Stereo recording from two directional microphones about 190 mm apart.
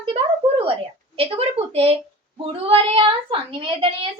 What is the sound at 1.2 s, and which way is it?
A woman's voice, 30° right (ahead or behind).